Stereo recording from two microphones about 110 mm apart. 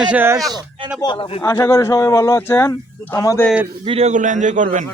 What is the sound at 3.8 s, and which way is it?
A man's voice, 70° right (ahead or behind).